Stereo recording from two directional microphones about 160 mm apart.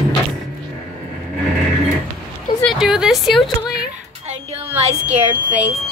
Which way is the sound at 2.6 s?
Centre (ahead or behind).